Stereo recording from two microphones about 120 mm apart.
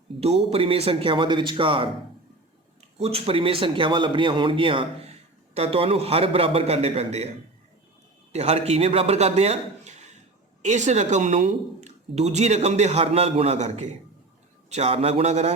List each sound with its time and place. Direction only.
0.2 s a man's voice: 60° right (ahead or behind)
3.0 s a man's voice: 55° right (ahead or behind)
8.3 s a man's voice: 60° right (ahead or behind)
14.7 s a man's voice: 60° right (ahead or behind)